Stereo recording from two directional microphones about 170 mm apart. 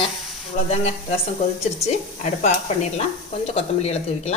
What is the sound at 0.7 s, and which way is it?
Speech, 35° left (ahead or behind).